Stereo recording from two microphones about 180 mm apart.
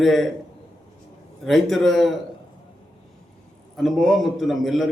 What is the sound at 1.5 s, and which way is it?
Speech, centre (ahead or behind).